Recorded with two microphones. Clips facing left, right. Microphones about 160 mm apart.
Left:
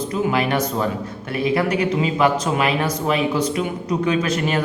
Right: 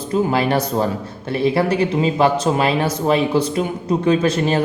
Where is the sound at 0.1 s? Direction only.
30° right (ahead or behind).